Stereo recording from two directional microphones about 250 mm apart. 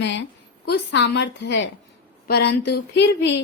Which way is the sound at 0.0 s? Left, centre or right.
Left.